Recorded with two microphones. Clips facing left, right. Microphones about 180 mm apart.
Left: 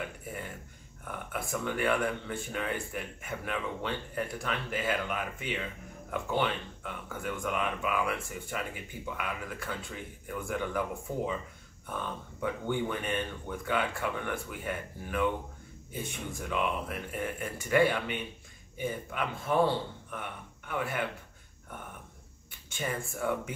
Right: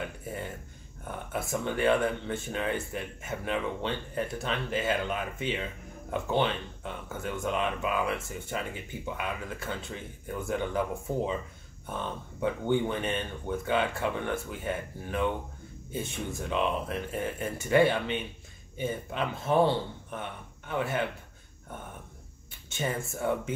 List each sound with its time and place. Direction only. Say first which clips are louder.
1.0 s speech: right 3 dB; 25° right (ahead or behind)
11.8 s a man's voice: right 2 dB; 25° right (ahead or behind)
22.7 s speech: right 3 dB; 25° right (ahead or behind)